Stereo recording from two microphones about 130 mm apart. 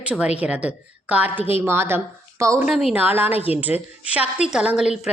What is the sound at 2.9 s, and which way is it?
A woman's voice, 15° right (ahead or behind).